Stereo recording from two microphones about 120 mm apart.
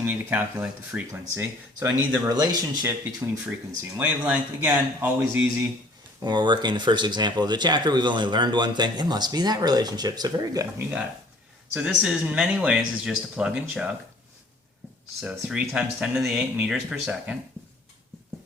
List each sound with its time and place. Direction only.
0.0 s speech: 15° right (ahead or behind)
2.3 s speech: 35° right (ahead or behind)
2.8 s speech: 20° right (ahead or behind)
6.2 s speech: 40° right (ahead or behind)
11.7 s speech: 5° right (ahead or behind)
15.2 s speech: 10° right (ahead or behind)